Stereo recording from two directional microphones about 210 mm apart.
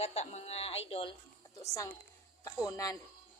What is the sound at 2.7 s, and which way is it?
Speech, 15° left (ahead or behind).